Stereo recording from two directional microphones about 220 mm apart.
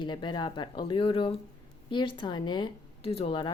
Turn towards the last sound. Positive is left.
turn(degrees=20)  # may be behind; listen again after turning